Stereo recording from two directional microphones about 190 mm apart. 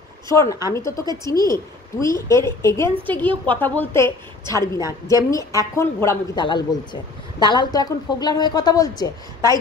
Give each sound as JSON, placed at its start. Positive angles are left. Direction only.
{"t": 0.3, "sound": "a woman's voice", "side_deg": 15}
{"t": 6.4, "sound": "speech", "side_deg": 25}